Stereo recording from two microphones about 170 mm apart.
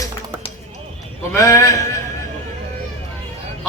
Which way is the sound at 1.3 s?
15° left (ahead or behind).